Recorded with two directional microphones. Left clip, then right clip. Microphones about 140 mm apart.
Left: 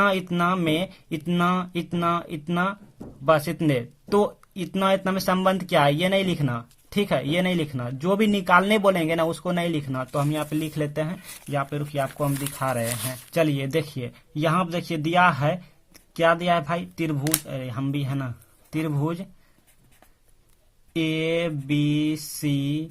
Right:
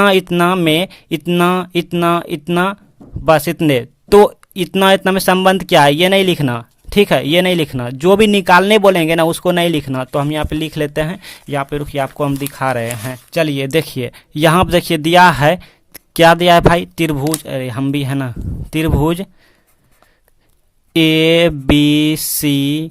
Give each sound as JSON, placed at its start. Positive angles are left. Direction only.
{"t": 0.0, "sound": "speech", "side_deg": -50}
{"t": 17.4, "sound": "mantra", "side_deg": -65}
{"t": 20.9, "sound": "mantra", "side_deg": -60}